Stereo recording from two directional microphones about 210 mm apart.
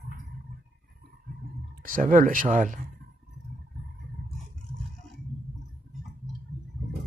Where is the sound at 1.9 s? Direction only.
40° right (ahead or behind).